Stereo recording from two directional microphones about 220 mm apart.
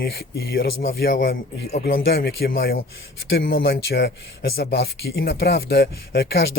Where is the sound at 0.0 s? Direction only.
45° left (ahead or behind).